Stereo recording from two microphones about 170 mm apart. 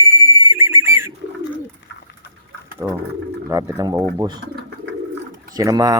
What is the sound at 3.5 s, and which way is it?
Speech, 20° right (ahead or behind).